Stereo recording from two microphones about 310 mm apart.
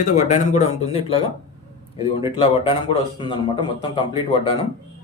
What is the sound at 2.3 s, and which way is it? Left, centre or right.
A man's voice, centre.